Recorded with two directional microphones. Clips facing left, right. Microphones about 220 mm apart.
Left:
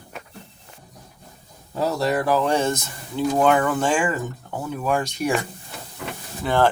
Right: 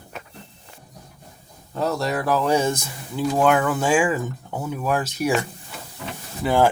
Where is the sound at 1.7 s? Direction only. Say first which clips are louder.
Left 2 dB; centre (ahead or behind).